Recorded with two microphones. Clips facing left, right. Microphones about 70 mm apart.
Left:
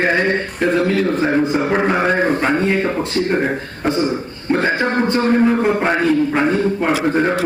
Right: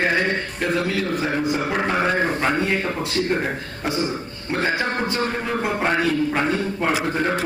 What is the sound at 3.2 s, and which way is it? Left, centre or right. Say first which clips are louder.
Speech: left 3 dB; centre.